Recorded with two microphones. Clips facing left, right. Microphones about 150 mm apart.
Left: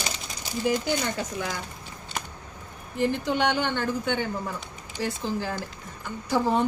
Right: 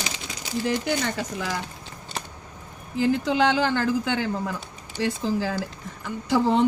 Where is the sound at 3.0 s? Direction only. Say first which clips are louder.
Right 3 dB; 90° right.